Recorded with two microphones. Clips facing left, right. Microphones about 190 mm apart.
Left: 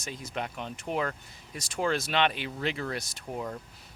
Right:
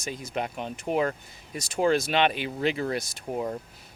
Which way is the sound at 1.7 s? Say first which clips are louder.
Right 5 dB; 10° right (ahead or behind).